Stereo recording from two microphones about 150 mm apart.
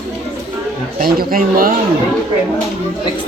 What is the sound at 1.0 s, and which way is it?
Speech, 75° right (ahead or behind).